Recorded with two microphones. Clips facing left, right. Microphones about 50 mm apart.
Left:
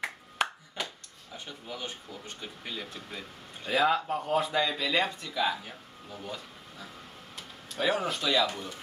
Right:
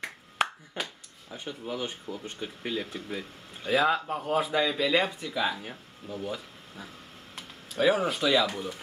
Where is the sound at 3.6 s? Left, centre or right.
Centre.